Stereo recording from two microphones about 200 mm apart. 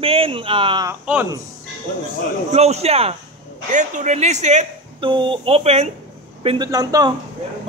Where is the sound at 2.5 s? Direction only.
30° right (ahead or behind).